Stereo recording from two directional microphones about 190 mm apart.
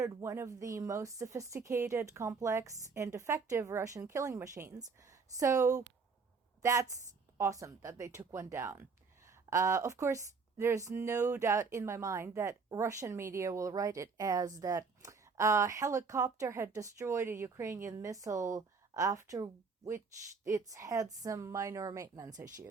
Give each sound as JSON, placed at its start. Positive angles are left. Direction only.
{"t": 0.0, "sound": "a woman's voice", "side_deg": -15}